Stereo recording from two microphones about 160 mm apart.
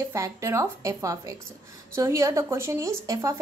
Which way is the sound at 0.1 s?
20° right (ahead or behind).